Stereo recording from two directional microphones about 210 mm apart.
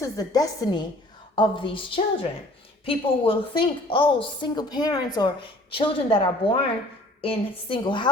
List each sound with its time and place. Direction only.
0.0 s a woman's voice: 15° left (ahead or behind)